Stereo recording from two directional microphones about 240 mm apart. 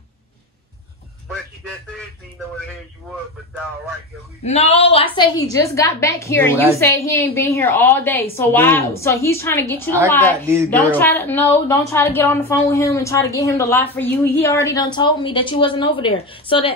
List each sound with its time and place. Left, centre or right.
4.5 s a woman's voice: left